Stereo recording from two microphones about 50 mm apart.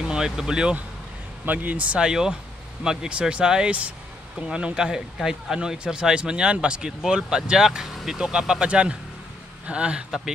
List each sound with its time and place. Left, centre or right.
0.0 s speech: centre
1.4 s speech: right
2.0 s speech: centre